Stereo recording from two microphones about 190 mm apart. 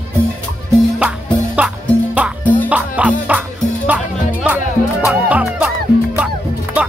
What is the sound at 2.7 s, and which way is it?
Music, 5° right (ahead or behind).